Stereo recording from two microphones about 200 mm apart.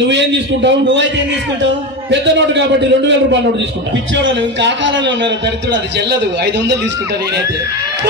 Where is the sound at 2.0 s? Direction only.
65° right (ahead or behind).